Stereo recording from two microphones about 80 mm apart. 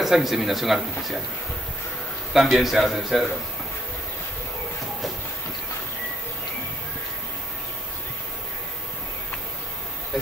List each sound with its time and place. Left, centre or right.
0.0 s a man's voice: centre
2.3 s a man's voice: centre